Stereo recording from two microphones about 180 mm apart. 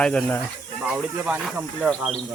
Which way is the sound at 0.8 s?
5° right (ahead or behind).